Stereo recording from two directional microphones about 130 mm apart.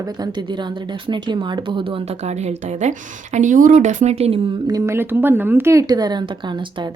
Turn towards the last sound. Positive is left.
turn(degrees=-35)  # may be behind; listen again after turning